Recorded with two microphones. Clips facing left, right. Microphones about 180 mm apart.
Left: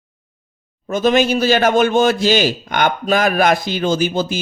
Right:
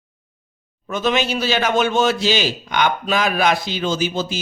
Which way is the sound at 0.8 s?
45° left (ahead or behind).